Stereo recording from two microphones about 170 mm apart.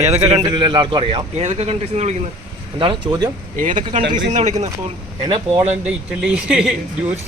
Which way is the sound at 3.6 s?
50° right (ahead or behind).